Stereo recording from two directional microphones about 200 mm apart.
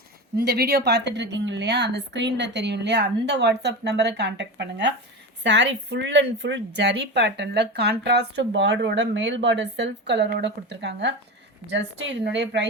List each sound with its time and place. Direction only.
0.3 s a woman's voice: 50° right (ahead or behind)